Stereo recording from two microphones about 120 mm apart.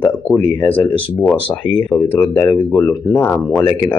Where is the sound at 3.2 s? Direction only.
15° left (ahead or behind).